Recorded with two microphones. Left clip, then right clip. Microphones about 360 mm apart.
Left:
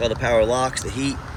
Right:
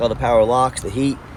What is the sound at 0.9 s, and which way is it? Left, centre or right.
Speech, right.